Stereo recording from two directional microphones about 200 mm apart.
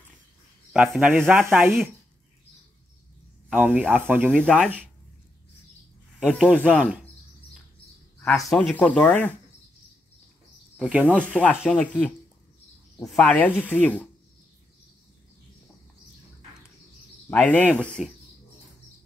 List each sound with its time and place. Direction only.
0.7 s speech: 5° right (ahead or behind)
3.4 s speech: 10° right (ahead or behind)
4.3 s speech: 5° left (ahead or behind)
6.1 s speech: 5° left (ahead or behind)
8.2 s speech: 10° left (ahead or behind)
10.8 s speech: 5° right (ahead or behind)
11.2 s speech: 5° left (ahead or behind)
17.3 s speech: 10° left (ahead or behind)